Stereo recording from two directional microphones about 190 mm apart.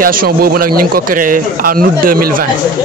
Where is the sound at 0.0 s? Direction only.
50° right (ahead or behind).